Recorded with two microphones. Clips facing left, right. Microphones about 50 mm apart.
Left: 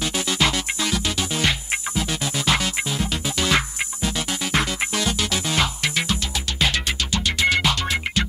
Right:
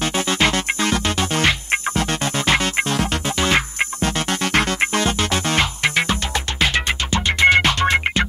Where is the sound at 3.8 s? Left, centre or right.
Right.